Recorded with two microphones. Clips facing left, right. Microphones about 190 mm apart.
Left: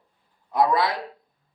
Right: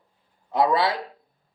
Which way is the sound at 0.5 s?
25° right (ahead or behind).